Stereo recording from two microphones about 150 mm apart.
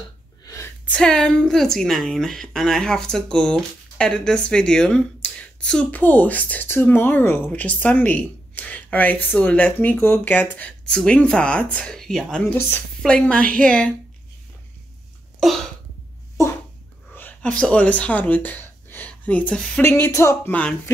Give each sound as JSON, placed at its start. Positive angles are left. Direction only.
{"t": 0.8, "sound": "a woman's voice", "side_deg": 5}
{"t": 15.4, "sound": "a sound", "side_deg": 0}
{"t": 17.1, "sound": "a woman's voice", "side_deg": 10}